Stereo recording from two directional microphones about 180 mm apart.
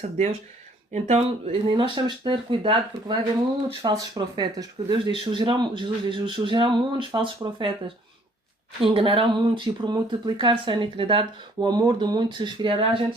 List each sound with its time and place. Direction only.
0.9 s speech: 35° right (ahead or behind)